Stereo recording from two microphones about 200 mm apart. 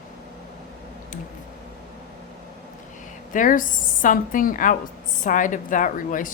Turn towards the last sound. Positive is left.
turn(degrees=40)  # may be behind; listen again after turning